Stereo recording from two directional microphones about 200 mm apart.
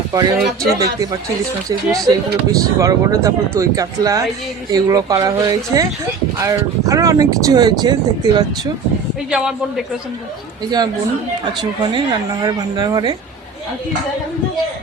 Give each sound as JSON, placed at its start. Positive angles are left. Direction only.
{"t": 0.1, "sound": "speech", "side_deg": -20}
{"t": 2.0, "sound": "speech", "side_deg": -15}
{"t": 9.3, "sound": "a man's voice", "side_deg": -5}
{"t": 11.8, "sound": "speech", "side_deg": -20}